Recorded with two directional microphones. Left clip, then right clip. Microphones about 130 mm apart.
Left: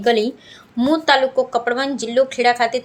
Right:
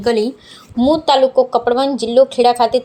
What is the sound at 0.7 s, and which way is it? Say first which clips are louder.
A woman's voice: right 3 dB; centre (ahead or behind).